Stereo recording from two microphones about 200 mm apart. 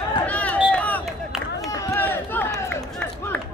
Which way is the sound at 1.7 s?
15° left (ahead or behind).